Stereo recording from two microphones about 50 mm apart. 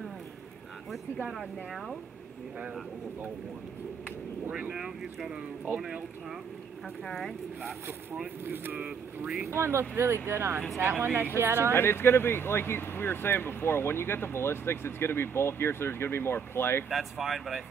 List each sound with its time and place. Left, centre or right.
4.5 s speech: right
4.7 s speech: centre
7.1 s speech: centre
8.7 s speech: right
9.5 s speech: right
10.8 s speech: right
11.7 s speech: left
16.9 s speech: centre